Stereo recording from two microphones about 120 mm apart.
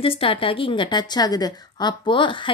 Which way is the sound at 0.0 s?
50° left (ahead or behind).